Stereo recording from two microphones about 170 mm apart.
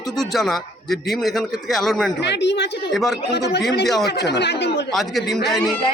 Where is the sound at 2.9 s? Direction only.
Centre (ahead or behind).